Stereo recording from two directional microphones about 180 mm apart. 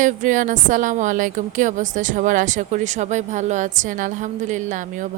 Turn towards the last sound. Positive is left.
turn(degrees=-45)  # may be behind; listen again after turning